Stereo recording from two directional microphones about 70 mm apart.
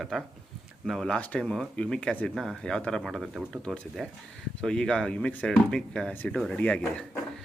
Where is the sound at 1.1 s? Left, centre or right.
Centre.